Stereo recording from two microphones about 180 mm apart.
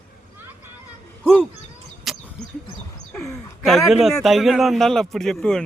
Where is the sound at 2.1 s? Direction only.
Centre (ahead or behind).